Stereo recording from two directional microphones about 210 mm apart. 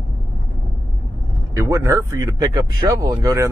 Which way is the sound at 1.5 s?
15° right (ahead or behind).